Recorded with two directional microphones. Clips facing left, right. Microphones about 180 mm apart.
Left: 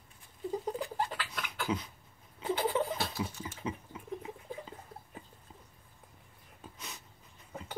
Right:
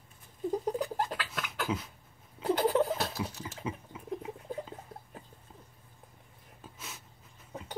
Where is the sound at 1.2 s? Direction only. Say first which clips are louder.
Right 2 dB; 45° right (ahead or behind).